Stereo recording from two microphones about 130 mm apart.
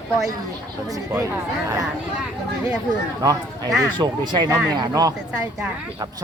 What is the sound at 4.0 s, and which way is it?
Speech, 35° right (ahead or behind).